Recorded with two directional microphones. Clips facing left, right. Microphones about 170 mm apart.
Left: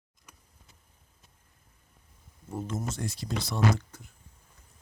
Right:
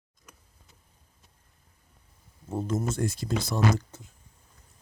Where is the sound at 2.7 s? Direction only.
50° right (ahead or behind).